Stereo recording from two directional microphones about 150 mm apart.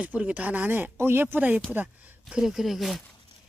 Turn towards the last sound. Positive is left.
turn(degrees=0)  # may be behind; listen again after turning